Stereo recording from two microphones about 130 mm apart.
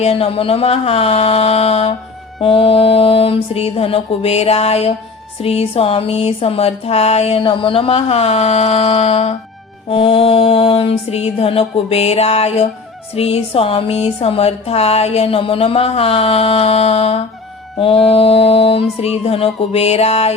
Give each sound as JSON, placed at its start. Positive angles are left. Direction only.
{"t": 0.0, "sound": "speech", "side_deg": 50}